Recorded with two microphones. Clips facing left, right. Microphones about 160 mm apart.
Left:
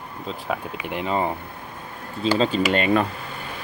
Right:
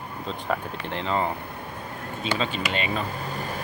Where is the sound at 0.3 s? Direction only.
5° left (ahead or behind).